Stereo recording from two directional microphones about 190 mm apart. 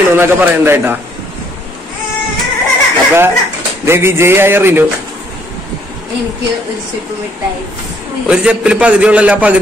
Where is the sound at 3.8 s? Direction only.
15° right (ahead or behind).